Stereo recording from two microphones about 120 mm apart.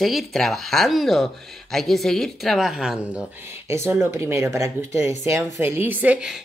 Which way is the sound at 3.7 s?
20° right (ahead or behind).